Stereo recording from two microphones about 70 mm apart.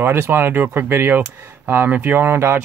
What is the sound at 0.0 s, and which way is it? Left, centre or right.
Speech, right.